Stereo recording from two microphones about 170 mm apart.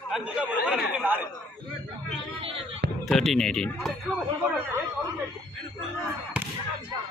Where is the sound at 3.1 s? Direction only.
Centre (ahead or behind).